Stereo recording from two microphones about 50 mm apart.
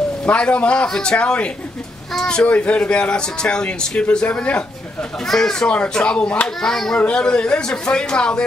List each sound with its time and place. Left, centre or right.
0.2 s a man's voice: left
2.5 s a man's voice: left
5.3 s a man's voice: centre
5.7 s a man's voice: left